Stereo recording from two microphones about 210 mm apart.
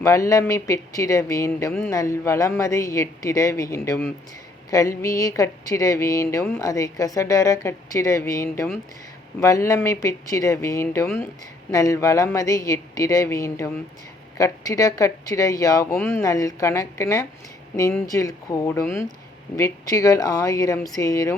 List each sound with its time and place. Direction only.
0.0 s speech: 15° left (ahead or behind)